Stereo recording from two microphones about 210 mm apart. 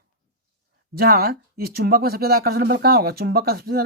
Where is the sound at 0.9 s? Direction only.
45° right (ahead or behind).